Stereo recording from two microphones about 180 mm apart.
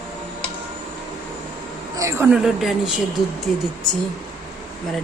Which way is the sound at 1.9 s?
15° right (ahead or behind).